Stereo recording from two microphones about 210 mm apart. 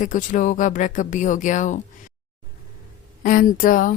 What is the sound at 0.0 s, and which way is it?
Speech, 40° left (ahead or behind).